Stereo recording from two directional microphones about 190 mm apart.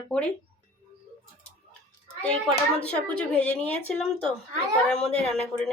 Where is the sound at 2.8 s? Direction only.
5° left (ahead or behind).